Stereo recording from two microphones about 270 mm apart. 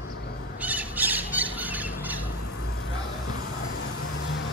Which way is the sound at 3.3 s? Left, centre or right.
Left.